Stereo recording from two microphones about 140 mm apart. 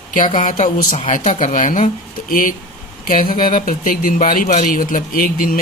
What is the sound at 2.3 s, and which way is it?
Speech, 80° left.